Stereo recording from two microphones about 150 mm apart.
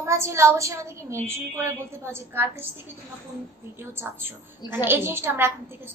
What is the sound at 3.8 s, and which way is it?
A woman's voice, 15° right (ahead or behind).